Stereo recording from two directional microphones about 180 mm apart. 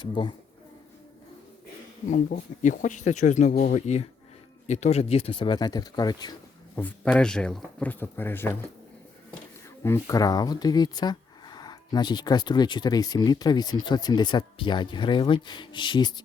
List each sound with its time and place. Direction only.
0.0 s speech: 25° left (ahead or behind)
2.6 s speech: 45° left (ahead or behind); by 6.3 s 20° left (ahead or behind)
6.7 s speech: 5° left (ahead or behind)
9.8 s speech: 15° left (ahead or behind)